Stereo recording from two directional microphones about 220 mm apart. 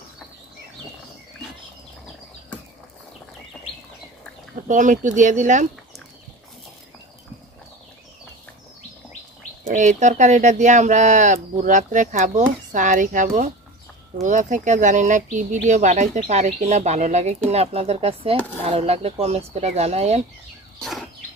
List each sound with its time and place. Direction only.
4.6 s speech: 35° right (ahead or behind)
9.7 s speech: 35° right (ahead or behind)